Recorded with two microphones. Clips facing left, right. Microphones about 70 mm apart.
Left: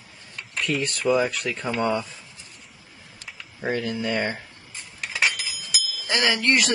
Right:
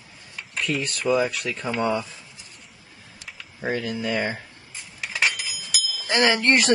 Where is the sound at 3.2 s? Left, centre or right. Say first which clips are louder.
Even; centre.